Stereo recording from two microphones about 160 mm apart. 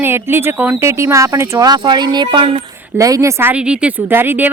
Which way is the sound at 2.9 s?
20° right (ahead or behind).